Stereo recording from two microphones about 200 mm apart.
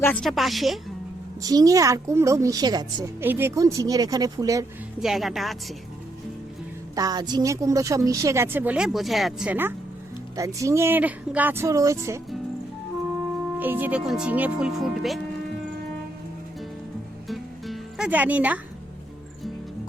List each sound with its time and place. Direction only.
0.0 s speech: 5° left (ahead or behind)
1.4 s a woman's voice: 20° right (ahead or behind)
4.9 s speech: centre (ahead or behind)
6.9 s a woman's voice: 20° right (ahead or behind)
13.6 s speech: 10° right (ahead or behind)
17.2 s music: centre (ahead or behind)